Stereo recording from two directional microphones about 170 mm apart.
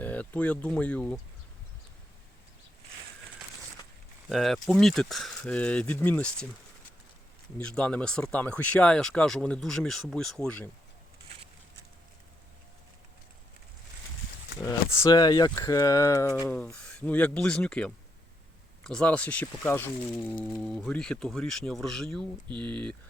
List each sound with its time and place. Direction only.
0.0 s speech: 10° left (ahead or behind)
4.3 s speech: centre (ahead or behind)
7.6 s speech: 5° left (ahead or behind)
14.6 s speech: 15° left (ahead or behind)
16.7 s speech: 5° left (ahead or behind)
22.4 s speech: 30° right (ahead or behind)